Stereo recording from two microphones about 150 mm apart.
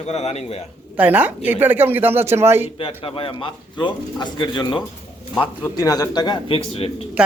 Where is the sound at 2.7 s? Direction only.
35° left (ahead or behind).